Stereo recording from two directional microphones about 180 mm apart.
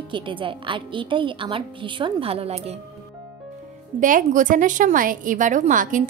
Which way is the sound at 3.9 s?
45° right (ahead or behind).